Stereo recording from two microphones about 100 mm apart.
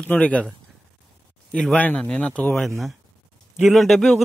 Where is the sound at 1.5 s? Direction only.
5° left (ahead or behind).